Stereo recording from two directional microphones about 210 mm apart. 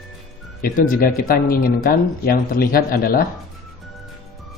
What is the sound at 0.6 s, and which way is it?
Speech, 40° left (ahead or behind).